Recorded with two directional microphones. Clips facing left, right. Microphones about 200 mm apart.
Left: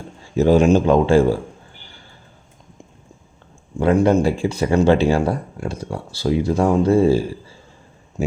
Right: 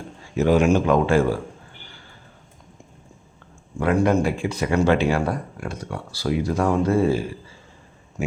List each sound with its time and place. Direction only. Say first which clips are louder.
0.2 s speech: left 4 dB; 30° left (ahead or behind)
3.8 s speech: left 4 dB; 25° left (ahead or behind)